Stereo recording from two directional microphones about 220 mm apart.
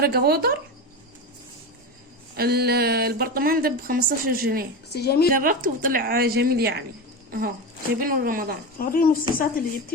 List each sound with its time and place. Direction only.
0.0 s speech: 45° right (ahead or behind)
2.3 s speech: 45° right (ahead or behind)
4.9 s speech: 45° left (ahead or behind)
5.3 s speech: 40° right (ahead or behind)
8.8 s a woman's voice: 40° left (ahead or behind)